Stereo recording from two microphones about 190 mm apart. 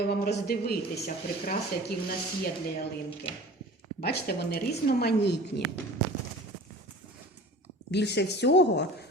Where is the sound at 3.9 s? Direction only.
55° left (ahead or behind).